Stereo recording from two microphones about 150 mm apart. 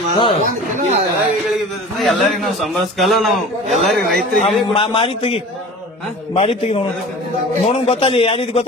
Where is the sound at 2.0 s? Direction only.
Centre (ahead or behind).